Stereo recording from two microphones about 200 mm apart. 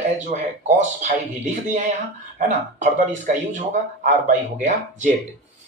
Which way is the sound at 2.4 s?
40° right (ahead or behind).